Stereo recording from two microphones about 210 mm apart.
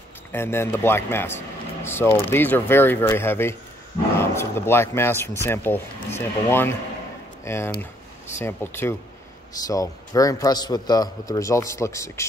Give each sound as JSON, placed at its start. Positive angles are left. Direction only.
{"t": 0.3, "sound": "a man's voice", "side_deg": 10}